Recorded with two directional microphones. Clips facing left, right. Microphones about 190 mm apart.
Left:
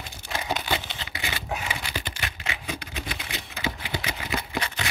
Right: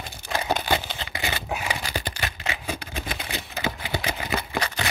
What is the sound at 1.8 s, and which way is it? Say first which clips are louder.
Typewriter: right 3 dB; 40° right (ahead or behind).